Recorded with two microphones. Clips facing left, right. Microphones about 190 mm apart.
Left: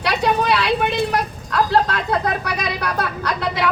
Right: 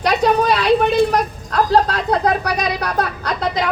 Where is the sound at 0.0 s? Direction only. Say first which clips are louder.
Right 4 dB; 45° right (ahead or behind).